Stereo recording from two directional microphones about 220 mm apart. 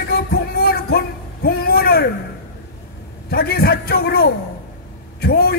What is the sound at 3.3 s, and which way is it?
A man's voice, 45° left (ahead or behind).